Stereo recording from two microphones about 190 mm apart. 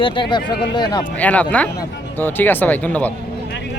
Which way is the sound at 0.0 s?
25° left (ahead or behind).